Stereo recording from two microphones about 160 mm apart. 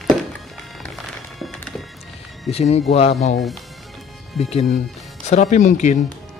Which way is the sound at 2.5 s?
40° left (ahead or behind).